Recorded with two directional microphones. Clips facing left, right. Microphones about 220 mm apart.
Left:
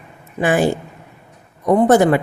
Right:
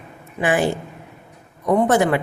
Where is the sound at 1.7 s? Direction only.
35° left (ahead or behind).